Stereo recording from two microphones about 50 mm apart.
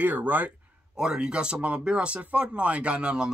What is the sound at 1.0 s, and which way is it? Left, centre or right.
Speech, centre.